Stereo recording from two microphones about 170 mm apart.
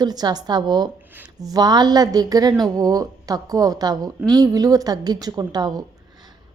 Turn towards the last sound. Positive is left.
turn(degrees=-25)  # may be behind; listen again after turning